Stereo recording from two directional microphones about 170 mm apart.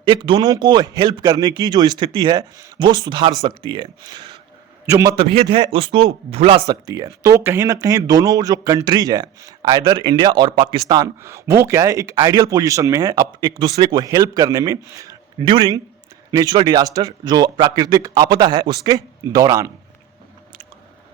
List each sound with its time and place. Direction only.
0.0 s speech: 30° right (ahead or behind)
5.1 s speech: 35° right (ahead or behind)
6.7 s speech: 20° right (ahead or behind)